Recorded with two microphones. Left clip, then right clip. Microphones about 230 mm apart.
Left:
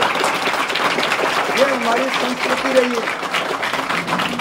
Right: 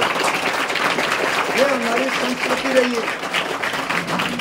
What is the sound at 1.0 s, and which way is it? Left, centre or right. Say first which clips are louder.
Speech: left 2 dB; centre.